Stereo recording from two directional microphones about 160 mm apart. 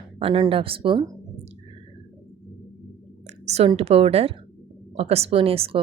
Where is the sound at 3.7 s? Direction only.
40° right (ahead or behind).